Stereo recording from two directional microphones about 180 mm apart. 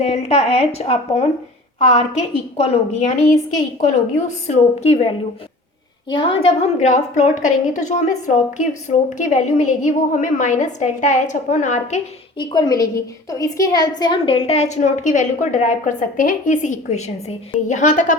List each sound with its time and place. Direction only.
0.0 s a woman's voice: 35° left (ahead or behind)
12.4 s a woman's voice: 20° left (ahead or behind); by 18.0 s 45° left (ahead or behind)